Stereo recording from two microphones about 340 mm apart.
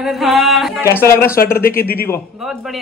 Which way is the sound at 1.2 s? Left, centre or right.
Left.